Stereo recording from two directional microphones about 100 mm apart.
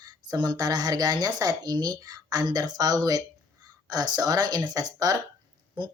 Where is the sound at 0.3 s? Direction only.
45° right (ahead or behind).